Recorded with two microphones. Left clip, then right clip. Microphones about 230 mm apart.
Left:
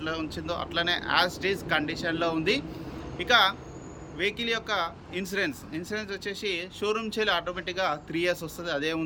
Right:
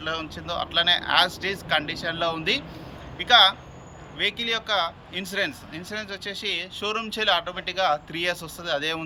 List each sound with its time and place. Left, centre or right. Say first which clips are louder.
0.0 s speech: right 2 dB; centre